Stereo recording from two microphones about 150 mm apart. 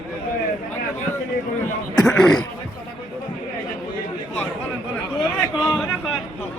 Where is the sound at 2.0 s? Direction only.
Centre (ahead or behind).